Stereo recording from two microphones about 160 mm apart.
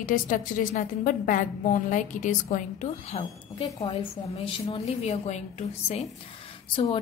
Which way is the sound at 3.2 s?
35° left (ahead or behind).